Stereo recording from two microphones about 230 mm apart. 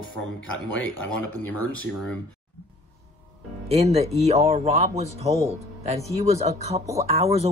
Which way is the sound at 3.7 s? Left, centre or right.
Right.